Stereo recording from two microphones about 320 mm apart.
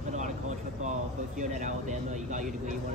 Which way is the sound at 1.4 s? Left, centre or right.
Right.